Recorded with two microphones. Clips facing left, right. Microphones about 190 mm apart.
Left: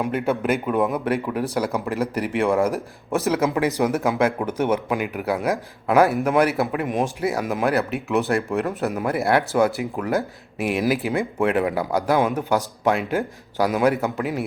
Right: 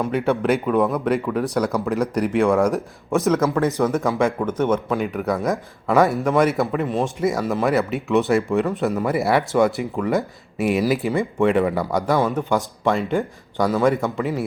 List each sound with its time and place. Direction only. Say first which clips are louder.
0.0 s a man's voice: right 2 dB; 5° left (ahead or behind)
12.1 s a man's voice: even; 15° left (ahead or behind)